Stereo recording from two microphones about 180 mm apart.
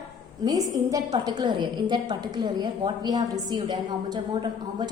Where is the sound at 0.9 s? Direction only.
20° right (ahead or behind).